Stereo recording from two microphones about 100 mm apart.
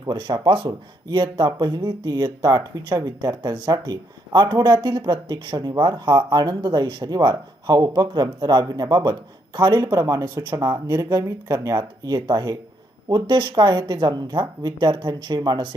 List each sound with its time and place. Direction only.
0.0 s speech: 45° right (ahead or behind)
10.0 s speech: 35° right (ahead or behind)